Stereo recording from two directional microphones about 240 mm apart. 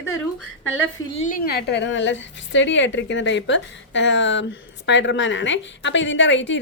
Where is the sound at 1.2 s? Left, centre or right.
Left.